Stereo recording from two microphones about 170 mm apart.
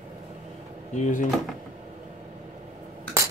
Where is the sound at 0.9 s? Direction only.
45° left (ahead or behind).